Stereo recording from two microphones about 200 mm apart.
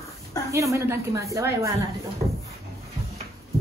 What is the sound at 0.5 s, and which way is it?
A woman's voice, 15° right (ahead or behind).